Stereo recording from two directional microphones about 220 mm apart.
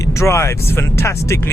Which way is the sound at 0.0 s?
15° left (ahead or behind).